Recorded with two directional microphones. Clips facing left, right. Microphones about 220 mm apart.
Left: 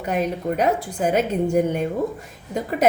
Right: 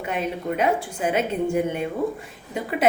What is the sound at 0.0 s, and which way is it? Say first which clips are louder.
A woman's voice: left 4 dB; 40° left (ahead or behind).